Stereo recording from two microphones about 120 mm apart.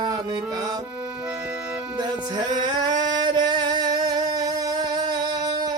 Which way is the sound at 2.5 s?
35° right (ahead or behind).